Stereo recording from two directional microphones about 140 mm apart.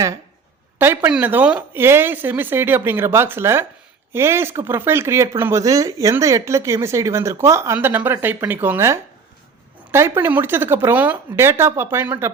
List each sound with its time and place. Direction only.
0.8 s speech: 15° right (ahead or behind)